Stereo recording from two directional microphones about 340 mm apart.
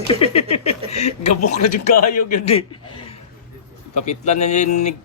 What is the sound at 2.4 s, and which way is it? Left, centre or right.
Speech, centre.